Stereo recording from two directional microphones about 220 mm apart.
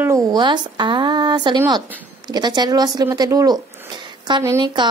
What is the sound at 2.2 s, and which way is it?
A woman's voice, 20° right (ahead or behind).